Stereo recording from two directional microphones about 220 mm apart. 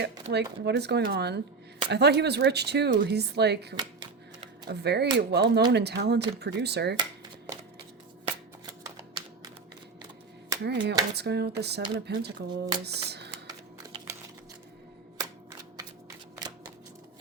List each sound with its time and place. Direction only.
0.0 s speech: 50° right (ahead or behind)
10.6 s speech: 50° right (ahead or behind)
12.8 s a sound: 50° right (ahead or behind)
13.7 s typing: 15° right (ahead or behind)